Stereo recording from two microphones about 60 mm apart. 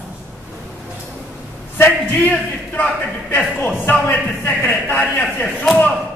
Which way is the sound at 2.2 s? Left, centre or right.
Left.